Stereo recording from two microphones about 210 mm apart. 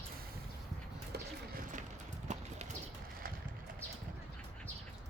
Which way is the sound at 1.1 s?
45° right (ahead or behind).